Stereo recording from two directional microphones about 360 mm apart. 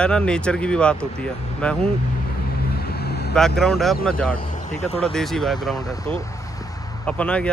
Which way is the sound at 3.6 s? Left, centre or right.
Centre.